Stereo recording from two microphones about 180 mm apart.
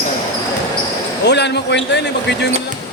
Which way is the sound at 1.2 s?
70° left (ahead or behind).